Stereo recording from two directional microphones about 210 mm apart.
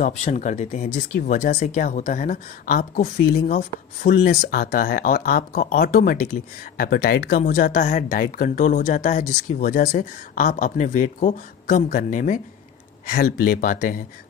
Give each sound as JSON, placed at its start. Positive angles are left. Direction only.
{"t": 0.0, "sound": "speech", "side_deg": 35}